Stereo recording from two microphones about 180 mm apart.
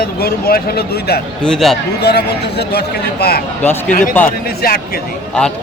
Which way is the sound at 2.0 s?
65° left (ahead or behind).